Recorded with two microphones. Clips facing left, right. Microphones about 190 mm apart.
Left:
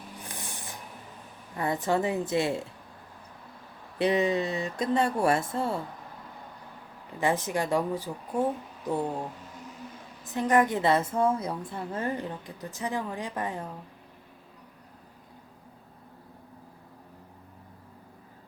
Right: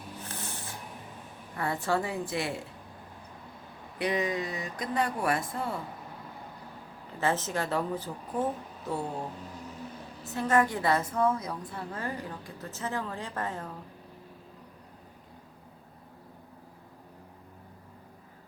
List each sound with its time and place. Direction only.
0.3 s music: 15° left (ahead or behind)
1.5 s a woman's voice: 20° left (ahead or behind)
3.9 s a woman's voice: 25° left (ahead or behind)
7.2 s speech: 15° left (ahead or behind)
10.3 s a woman's voice: 15° left (ahead or behind)